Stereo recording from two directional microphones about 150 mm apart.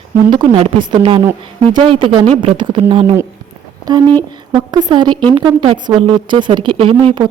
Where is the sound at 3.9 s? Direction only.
25° right (ahead or behind).